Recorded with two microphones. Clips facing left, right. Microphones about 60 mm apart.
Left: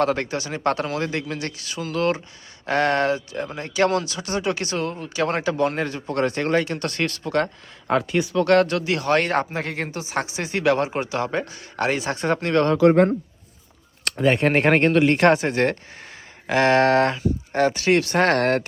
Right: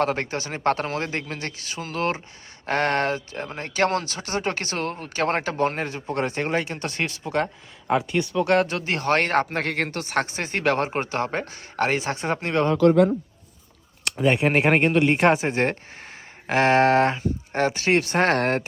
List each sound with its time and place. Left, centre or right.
0.0 s speech: right
7.4 s speech: centre
8.4 s speech: right
12.2 s speech: right
14.0 s speech: centre
15.1 s speech: centre